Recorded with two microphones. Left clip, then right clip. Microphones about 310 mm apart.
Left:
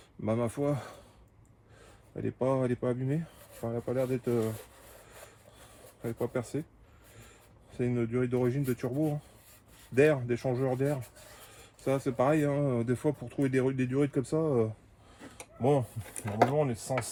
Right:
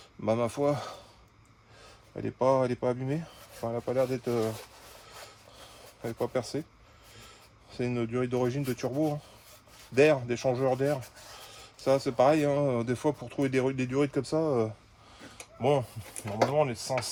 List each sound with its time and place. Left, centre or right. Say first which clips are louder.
0.3 s speech: right 4 dB; right
2.2 s speech: right 4 dB; right
6.0 s speech: right 3 dB; right
7.7 s speech: even; right
16.0 s speech: left 3 dB; centre
16.6 s speech: right 3 dB; centre